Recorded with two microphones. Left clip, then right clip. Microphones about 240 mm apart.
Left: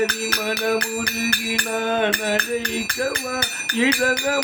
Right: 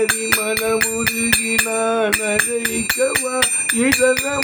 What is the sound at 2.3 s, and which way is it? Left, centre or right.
Music, right.